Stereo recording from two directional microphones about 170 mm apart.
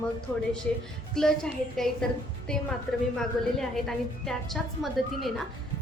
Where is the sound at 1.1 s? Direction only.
5° left (ahead or behind).